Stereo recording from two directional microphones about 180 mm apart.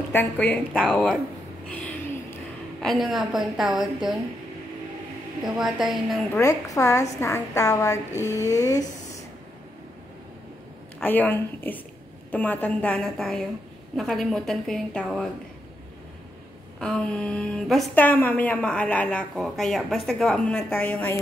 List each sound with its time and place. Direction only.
0.1 s a woman's voice: 10° left (ahead or behind)
2.8 s a woman's voice: centre (ahead or behind)
5.4 s a woman's voice: centre (ahead or behind)
6.4 s a woman's voice: 20° left (ahead or behind)
11.0 s a woman's voice: 10° left (ahead or behind)
16.8 s a woman's voice: 5° left (ahead or behind)